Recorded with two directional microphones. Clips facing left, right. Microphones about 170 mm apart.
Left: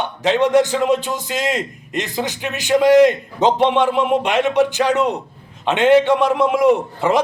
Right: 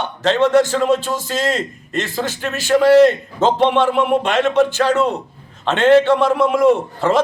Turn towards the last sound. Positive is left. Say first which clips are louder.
# even
turn(degrees=15)  # may be behind; listen again after turning